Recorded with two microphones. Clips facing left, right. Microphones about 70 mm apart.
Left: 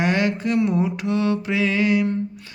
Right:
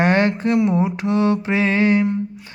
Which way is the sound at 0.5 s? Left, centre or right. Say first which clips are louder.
Right 3 dB; right.